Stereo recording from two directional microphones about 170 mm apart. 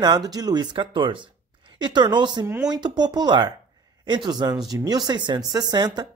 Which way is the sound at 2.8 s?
25° right (ahead or behind).